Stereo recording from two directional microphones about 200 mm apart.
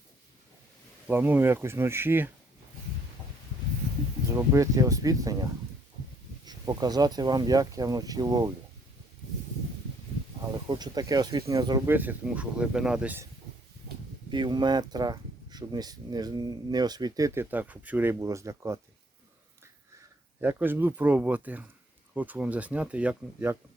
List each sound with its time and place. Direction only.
1.0 s speech: 10° right (ahead or behind)
4.3 s speech: 15° right (ahead or behind)
6.4 s speech: 20° right (ahead or behind)
10.7 s speech: 20° right (ahead or behind)
11.9 s speech: 10° right (ahead or behind)
14.3 s speech: 20° right (ahead or behind)
20.4 s speech: 10° right (ahead or behind)